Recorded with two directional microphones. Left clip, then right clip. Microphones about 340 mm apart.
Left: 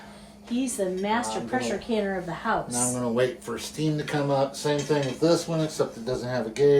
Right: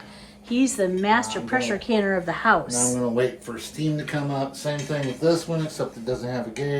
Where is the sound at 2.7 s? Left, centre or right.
Centre.